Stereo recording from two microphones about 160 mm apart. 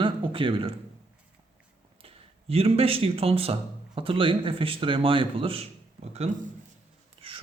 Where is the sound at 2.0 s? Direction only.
35° right (ahead or behind).